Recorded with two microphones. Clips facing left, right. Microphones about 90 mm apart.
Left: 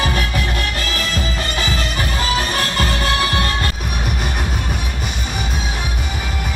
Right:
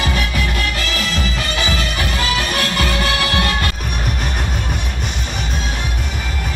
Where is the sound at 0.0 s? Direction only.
35° left (ahead or behind).